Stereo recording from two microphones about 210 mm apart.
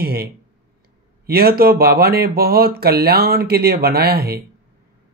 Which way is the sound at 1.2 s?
45° right (ahead or behind).